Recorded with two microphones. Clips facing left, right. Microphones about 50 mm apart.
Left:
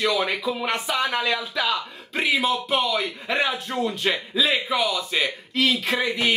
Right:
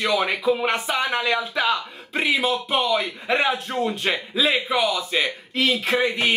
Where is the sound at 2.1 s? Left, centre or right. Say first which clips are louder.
Right 1 dB; centre.